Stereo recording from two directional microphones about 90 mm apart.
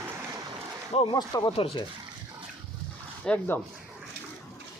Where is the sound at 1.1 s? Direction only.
50° left (ahead or behind).